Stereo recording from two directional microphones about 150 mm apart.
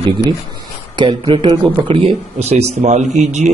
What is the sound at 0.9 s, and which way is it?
Speech, 30° right (ahead or behind).